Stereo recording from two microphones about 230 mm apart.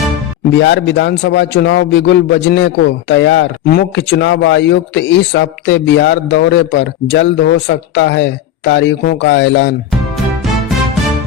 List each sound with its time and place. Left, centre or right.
0.5 s a man's voice: left